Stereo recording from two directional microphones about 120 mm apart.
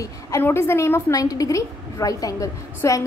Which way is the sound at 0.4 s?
20° left (ahead or behind).